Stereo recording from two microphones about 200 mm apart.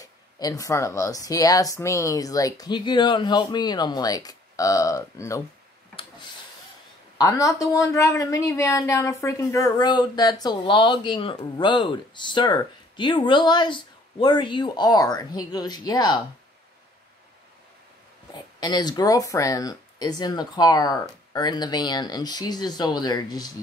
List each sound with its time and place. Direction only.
0.0 s speech: 20° left (ahead or behind)
7.2 s a woman's voice: 15° left (ahead or behind)
18.3 s a woman's voice: 20° left (ahead or behind)